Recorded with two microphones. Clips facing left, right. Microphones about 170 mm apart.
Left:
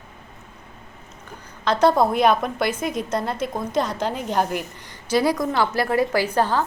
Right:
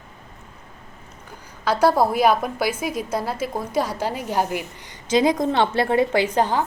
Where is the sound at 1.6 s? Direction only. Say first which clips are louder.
Even; 5° right (ahead or behind).